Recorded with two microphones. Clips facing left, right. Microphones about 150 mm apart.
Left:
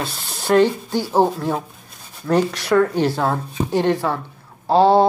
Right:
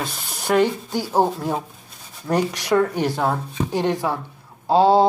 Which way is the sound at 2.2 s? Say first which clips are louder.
Left 3 dB; 15° right (ahead or behind).